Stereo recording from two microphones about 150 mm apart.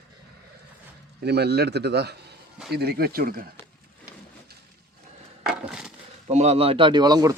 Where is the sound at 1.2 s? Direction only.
90° right.